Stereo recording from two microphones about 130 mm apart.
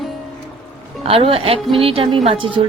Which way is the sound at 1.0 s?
45° right (ahead or behind).